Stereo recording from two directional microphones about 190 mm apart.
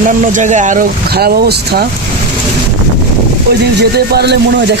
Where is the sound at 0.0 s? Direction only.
40° right (ahead or behind).